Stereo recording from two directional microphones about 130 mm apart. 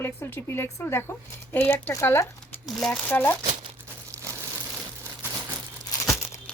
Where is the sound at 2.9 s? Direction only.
15° left (ahead or behind).